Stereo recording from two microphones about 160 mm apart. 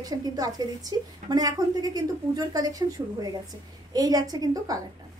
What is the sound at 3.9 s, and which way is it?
Speech, 25° right (ahead or behind).